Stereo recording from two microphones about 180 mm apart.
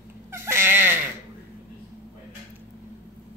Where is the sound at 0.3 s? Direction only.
15° right (ahead or behind).